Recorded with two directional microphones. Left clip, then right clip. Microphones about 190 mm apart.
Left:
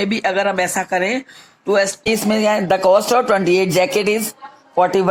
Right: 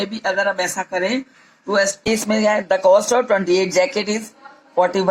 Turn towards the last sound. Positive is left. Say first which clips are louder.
# left 2 dB
turn(degrees=35)  # may be behind; listen again after turning